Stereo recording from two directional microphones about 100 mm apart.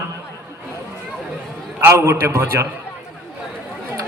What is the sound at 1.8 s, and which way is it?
Speech, 25° right (ahead or behind).